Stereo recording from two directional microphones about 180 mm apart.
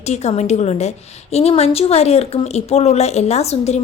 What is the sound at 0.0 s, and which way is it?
A woman's voice, 35° left (ahead or behind).